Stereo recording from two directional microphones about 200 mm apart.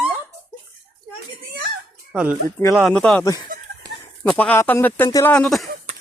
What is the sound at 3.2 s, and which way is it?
Speech, 15° left (ahead or behind).